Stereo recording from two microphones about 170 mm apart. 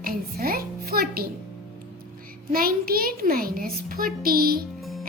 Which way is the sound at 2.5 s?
60° right (ahead or behind).